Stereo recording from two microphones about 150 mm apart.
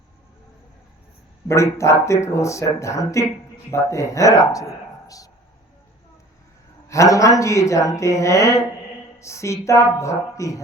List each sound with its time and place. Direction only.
1.5 s speech: 20° left (ahead or behind)
6.8 s speech: 20° left (ahead or behind)